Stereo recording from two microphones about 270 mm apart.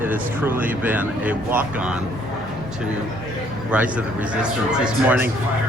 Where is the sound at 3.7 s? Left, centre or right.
Centre.